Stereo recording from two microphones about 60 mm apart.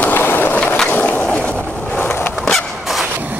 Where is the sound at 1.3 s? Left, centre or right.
Centre.